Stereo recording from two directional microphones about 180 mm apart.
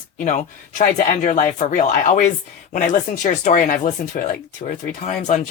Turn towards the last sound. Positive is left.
turn(degrees=45)  # may be behind; listen again after turning